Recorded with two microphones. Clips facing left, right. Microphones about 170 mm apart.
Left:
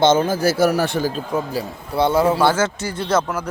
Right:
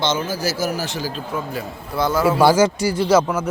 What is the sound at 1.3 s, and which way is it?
Speech, 30° left (ahead or behind).